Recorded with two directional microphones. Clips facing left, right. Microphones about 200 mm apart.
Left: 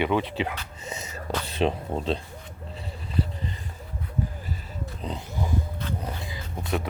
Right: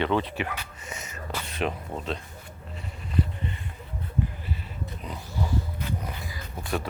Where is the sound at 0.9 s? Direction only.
30° left (ahead or behind).